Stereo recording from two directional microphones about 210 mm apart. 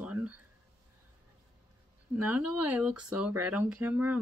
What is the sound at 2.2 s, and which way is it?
Speech, 5° right (ahead or behind).